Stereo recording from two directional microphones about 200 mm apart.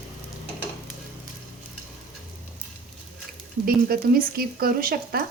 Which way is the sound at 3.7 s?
45° right (ahead or behind).